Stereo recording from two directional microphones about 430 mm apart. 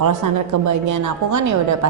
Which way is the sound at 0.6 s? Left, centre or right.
Right.